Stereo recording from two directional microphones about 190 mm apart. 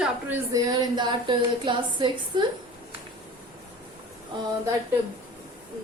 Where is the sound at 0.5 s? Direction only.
20° right (ahead or behind).